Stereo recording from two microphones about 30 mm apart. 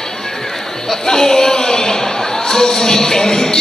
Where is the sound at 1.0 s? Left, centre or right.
Centre.